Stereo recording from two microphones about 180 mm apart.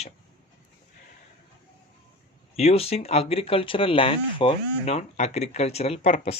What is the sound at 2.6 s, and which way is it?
Speech, 35° left (ahead or behind).